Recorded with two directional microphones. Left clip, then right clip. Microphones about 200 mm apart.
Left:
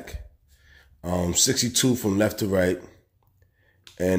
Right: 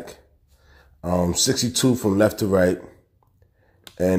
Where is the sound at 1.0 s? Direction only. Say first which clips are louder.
Right 2 dB; centre (ahead or behind).